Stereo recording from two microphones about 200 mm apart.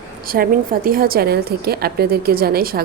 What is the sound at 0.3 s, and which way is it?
A woman's voice, 45° right (ahead or behind).